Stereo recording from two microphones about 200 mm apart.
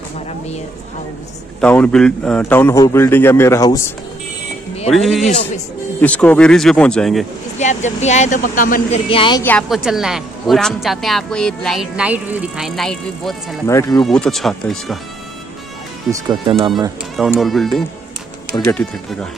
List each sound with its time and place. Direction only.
1.6 s a man's voice: 5° left (ahead or behind)
4.9 s a woman's voice: centre (ahead or behind)
7.5 s speech: 35° left (ahead or behind)
9.1 s a woman's voice: 25° left (ahead or behind)
9.4 s a woman's voice: 5° left (ahead or behind)
13.7 s a man's voice: 15° left (ahead or behind)
14.0 s a woman's voice: 5° left (ahead or behind)
16.1 s speech: 25° right (ahead or behind)
17.2 s a woman's voice: centre (ahead or behind)